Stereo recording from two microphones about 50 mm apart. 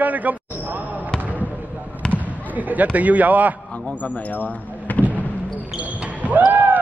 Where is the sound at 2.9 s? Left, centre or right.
Right.